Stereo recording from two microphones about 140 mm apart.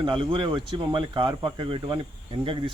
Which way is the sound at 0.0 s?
35° right (ahead or behind).